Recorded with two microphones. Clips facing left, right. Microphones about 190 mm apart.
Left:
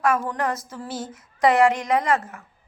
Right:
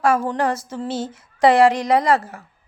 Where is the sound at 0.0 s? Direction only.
30° right (ahead or behind).